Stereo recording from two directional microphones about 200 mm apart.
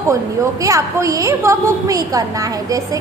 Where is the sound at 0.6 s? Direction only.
15° right (ahead or behind).